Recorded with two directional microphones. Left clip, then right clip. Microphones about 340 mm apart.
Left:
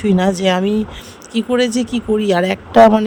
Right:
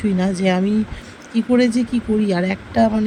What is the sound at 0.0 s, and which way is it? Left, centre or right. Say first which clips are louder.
Speech: left 5 dB; centre.